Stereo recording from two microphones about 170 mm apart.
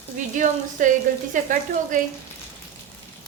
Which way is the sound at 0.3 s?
50° right (ahead or behind).